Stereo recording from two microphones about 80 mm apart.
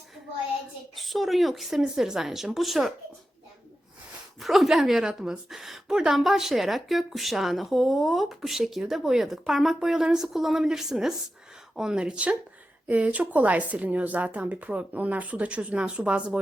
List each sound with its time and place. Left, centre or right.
0.9 s a woman's voice: centre
4.4 s a woman's voice: centre